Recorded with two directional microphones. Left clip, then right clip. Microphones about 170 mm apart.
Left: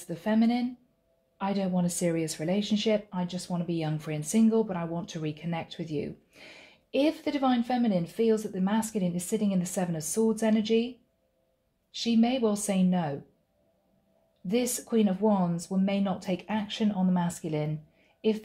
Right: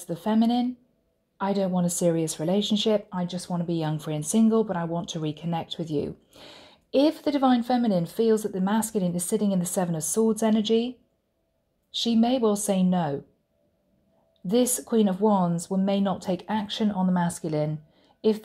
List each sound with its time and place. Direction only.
0.1 s speech: 35° right (ahead or behind)
11.9 s speech: 35° right (ahead or behind)
14.4 s speech: 35° right (ahead or behind)